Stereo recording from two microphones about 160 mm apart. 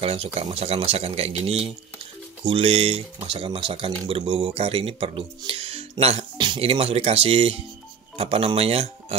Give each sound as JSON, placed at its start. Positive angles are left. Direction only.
{"t": 0.0, "sound": "speech", "side_deg": -40}